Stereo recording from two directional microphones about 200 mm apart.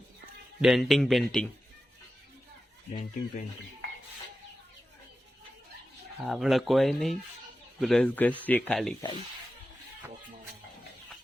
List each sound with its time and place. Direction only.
0.6 s speech: centre (ahead or behind)
2.9 s speech: 40° left (ahead or behind)
6.1 s speech: centre (ahead or behind)